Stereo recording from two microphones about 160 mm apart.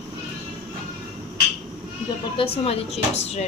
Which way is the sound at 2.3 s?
35° left (ahead or behind).